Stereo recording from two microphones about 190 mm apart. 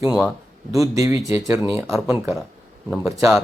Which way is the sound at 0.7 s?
15° right (ahead or behind).